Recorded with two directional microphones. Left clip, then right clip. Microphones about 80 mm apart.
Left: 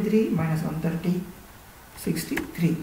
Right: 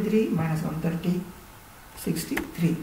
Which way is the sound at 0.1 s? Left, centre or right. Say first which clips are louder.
Left 1 dB; centre.